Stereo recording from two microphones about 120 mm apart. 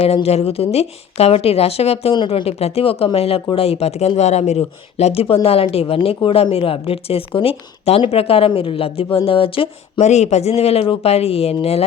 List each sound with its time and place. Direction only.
0.0 s speech: 60° left (ahead or behind)
2.1 s speech: 45° left (ahead or behind)
10.0 s speech: 70° left (ahead or behind)